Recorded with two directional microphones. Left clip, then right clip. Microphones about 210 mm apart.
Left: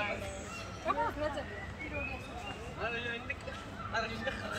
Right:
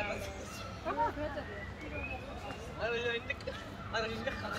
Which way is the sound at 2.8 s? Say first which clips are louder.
Right 3 dB; 50° right (ahead or behind).